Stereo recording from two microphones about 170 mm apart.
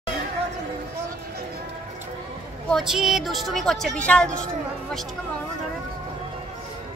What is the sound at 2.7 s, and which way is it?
Speech, centre (ahead or behind).